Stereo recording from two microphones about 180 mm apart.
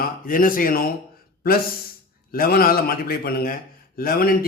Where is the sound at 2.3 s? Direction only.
55° left (ahead or behind).